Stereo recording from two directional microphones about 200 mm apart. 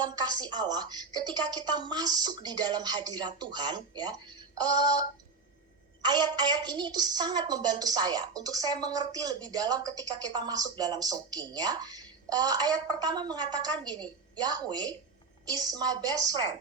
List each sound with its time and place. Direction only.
0.2 s a woman's voice: 20° right (ahead or behind)